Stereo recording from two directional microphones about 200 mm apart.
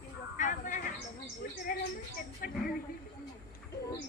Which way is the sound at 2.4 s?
45° left (ahead or behind).